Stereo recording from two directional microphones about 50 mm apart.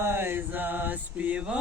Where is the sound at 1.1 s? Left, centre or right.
Right.